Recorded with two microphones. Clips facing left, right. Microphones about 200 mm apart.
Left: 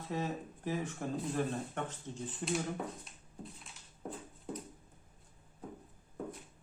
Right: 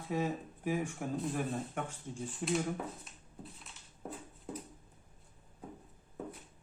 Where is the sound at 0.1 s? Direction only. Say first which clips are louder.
Right 3 dB; 10° right (ahead or behind).